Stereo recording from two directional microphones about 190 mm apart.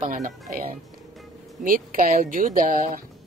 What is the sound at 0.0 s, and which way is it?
Speech, 45° right (ahead or behind).